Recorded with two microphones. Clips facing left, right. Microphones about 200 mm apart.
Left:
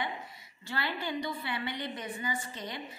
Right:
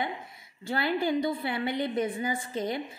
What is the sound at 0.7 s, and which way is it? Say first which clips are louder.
A woman's voice: right 8 dB; 50° right (ahead or behind).